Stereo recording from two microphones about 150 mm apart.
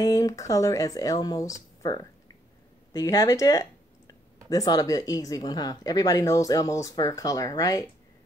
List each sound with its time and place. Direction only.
0.0 s speech: 25° left (ahead or behind)